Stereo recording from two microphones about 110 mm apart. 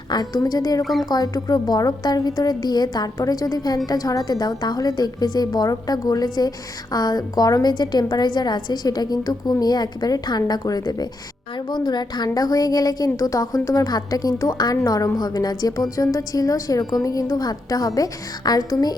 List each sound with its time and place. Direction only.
0.1 s a woman's voice: 40° left (ahead or behind)